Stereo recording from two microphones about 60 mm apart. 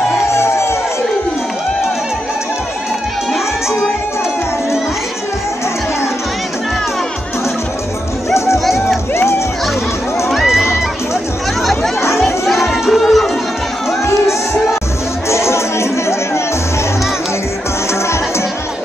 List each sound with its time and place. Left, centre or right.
0.3 s music: left
8.3 s music: left
10.3 s run: centre
12.4 s crowd: centre
15.2 s music: left